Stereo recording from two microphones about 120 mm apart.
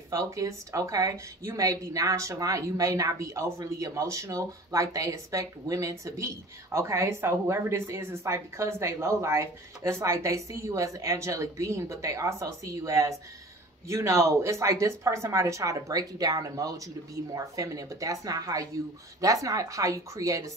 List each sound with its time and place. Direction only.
0.1 s speech: 25° right (ahead or behind)